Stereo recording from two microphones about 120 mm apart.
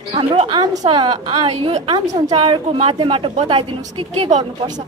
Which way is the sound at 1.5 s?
55° right (ahead or behind).